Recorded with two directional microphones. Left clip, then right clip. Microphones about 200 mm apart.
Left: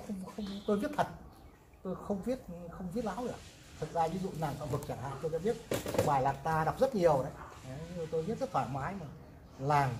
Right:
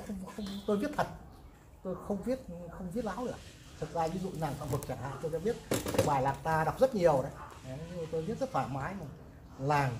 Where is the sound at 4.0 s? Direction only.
20° left (ahead or behind).